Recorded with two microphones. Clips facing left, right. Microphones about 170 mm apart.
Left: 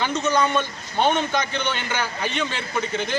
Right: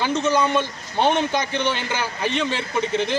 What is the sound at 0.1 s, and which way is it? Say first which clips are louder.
A man's voice: right 2 dB; 30° right (ahead or behind).